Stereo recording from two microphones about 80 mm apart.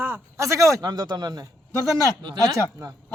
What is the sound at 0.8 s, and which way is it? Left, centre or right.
Speech, right.